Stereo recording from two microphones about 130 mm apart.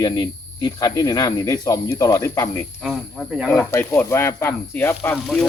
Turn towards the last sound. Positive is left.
turn(degrees=5)  # may be behind; listen again after turning